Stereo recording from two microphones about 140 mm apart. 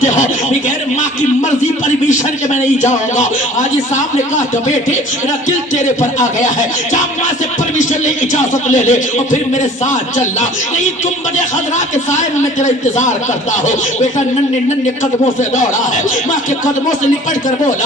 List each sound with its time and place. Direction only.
1.4 s a man's voice: 60° left (ahead or behind)
6.0 s a man's voice: 60° left (ahead or behind)
7.8 s a man's voice: 60° left (ahead or behind)
12.1 s a man's voice: 60° left (ahead or behind)
15.4 s a man's voice: 60° left (ahead or behind)